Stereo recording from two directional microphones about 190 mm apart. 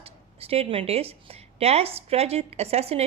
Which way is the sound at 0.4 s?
30° right (ahead or behind).